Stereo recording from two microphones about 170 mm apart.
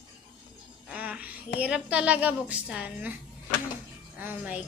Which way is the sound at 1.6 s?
5° right (ahead or behind).